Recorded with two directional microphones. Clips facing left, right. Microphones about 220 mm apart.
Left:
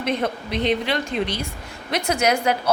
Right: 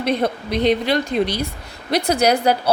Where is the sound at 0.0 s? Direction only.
35° right (ahead or behind).